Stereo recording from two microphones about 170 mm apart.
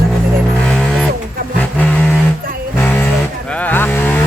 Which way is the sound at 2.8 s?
10° left (ahead or behind).